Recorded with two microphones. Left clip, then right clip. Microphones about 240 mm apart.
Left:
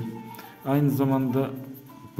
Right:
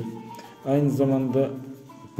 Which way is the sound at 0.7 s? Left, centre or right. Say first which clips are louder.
Right 2 dB; centre.